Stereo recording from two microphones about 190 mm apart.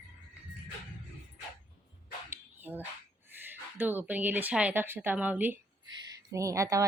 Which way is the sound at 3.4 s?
10° right (ahead or behind).